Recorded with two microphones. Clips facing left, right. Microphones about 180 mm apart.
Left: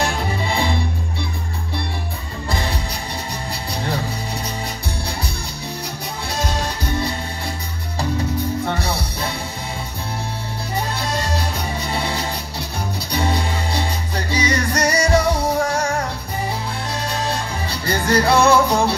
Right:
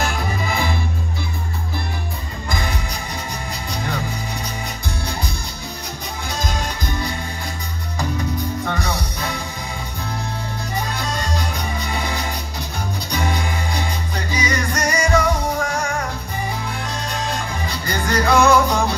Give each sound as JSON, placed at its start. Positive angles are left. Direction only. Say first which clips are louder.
{"t": 0.0, "sound": "music", "louder": "left 1 dB", "side_deg": 30}
{"t": 6.3, "sound": "music", "louder": "left 2 dB", "side_deg": 35}
{"t": 8.6, "sound": "music", "louder": "left 1 dB", "side_deg": 30}
{"t": 11.0, "sound": "music", "louder": "left 1 dB", "side_deg": 30}
{"t": 17.8, "sound": "music", "louder": "left 3 dB", "side_deg": 30}